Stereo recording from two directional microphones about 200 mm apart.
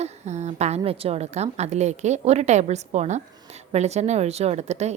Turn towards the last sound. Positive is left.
turn(degrees=-35)  # may be behind; listen again after turning